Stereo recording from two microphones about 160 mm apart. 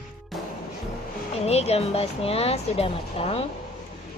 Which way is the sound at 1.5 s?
40° left (ahead or behind).